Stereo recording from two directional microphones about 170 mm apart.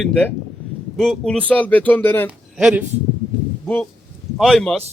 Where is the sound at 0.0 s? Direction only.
10° left (ahead or behind).